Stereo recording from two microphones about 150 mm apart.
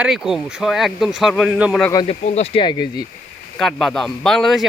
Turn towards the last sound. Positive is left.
turn(degrees=0)  # may be behind; listen again after turning